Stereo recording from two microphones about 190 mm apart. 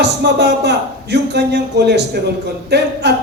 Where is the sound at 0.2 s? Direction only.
60° right (ahead or behind).